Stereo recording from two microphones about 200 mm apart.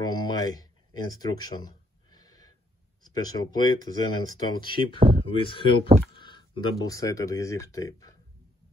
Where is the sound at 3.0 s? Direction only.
20° left (ahead or behind).